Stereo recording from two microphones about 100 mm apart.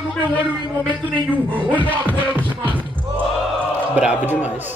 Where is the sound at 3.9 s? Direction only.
15° right (ahead or behind).